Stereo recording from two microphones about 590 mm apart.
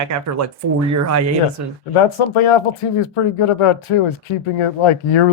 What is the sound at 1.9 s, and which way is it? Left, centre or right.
Speech, left.